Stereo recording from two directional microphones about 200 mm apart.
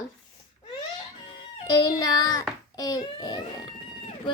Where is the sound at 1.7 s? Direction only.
20° left (ahead or behind).